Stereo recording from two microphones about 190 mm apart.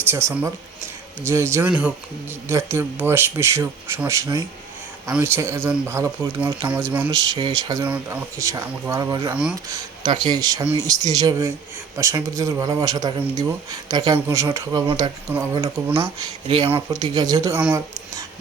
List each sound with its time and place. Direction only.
0.1 s speech: 15° right (ahead or behind)
7.1 s speech: 20° right (ahead or behind)
9.3 s speech: 5° right (ahead or behind)
9.7 s speech: 25° right (ahead or behind)
16.9 s speech: 20° right (ahead or behind)